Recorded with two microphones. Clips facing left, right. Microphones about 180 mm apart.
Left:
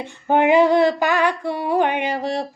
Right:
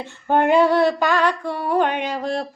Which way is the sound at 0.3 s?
15° left (ahead or behind).